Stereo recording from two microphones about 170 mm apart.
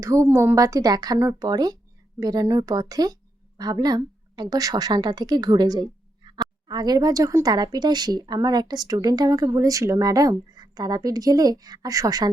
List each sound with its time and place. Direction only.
0.0 s a woman's voice: 15° right (ahead or behind)